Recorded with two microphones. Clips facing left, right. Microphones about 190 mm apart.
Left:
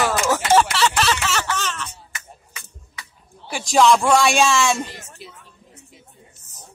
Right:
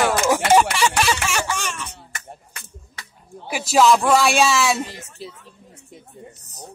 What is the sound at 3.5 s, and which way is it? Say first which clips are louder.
Speech: even; 5° right (ahead or behind).